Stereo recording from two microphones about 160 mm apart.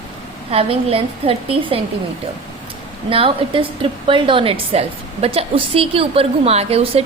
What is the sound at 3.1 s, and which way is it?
A woman's voice, 35° right (ahead or behind).